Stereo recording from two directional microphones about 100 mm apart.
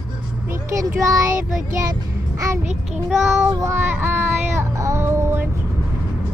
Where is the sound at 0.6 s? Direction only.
30° right (ahead or behind).